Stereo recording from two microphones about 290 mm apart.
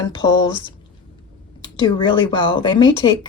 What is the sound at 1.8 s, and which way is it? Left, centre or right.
A woman's voice, centre.